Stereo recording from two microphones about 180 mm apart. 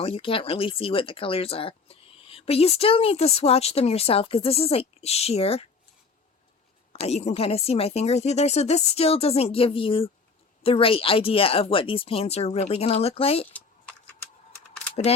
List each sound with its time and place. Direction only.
0.0 s speech: 30° left (ahead or behind)
6.9 s speech: 35° left (ahead or behind)